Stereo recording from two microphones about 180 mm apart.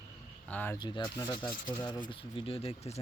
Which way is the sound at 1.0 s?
15° left (ahead or behind).